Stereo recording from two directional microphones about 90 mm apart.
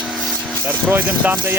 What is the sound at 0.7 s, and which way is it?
Speech, 20° right (ahead or behind).